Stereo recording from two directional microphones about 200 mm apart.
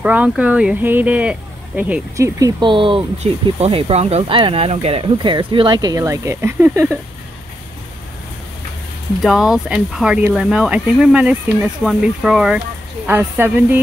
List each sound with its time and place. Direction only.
0.0 s speech: 5° right (ahead or behind)
9.2 s speech: centre (ahead or behind)